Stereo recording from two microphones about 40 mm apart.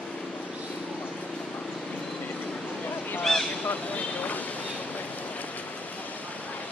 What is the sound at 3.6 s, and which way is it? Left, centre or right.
Vehicle, left.